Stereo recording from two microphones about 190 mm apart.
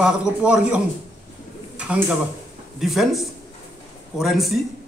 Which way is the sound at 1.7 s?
5° right (ahead or behind).